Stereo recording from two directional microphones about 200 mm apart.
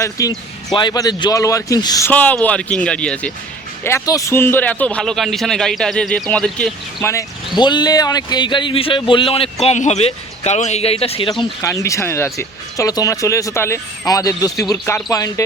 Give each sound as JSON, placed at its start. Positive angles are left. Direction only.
{"t": 0.0, "sound": "a man's voice", "side_deg": 15}